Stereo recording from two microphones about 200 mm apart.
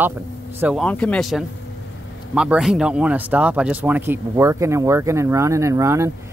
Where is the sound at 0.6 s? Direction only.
5° right (ahead or behind).